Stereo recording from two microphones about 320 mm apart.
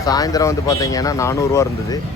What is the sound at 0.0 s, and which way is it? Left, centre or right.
Speech, centre.